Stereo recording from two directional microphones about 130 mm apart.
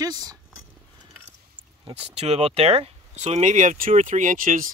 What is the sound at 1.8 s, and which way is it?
Speech, 50° right (ahead or behind).